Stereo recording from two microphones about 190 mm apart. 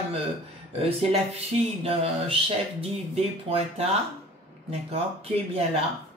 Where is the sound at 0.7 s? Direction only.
30° right (ahead or behind).